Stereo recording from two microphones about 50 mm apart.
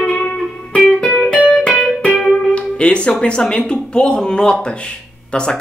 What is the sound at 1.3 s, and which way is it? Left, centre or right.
Music, centre.